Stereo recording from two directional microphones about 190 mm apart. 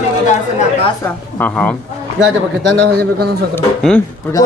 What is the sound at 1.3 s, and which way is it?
Speech, 10° left (ahead or behind).